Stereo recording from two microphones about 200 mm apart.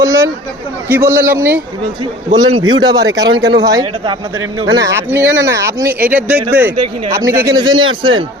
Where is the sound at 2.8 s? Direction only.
20° right (ahead or behind).